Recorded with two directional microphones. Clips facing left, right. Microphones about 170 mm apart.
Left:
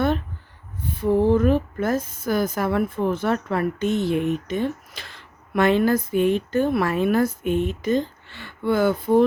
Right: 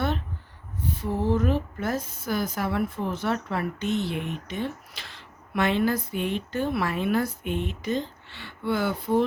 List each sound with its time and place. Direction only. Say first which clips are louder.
0.9 s a woman's voice: left 8 dB; 55° left (ahead or behind)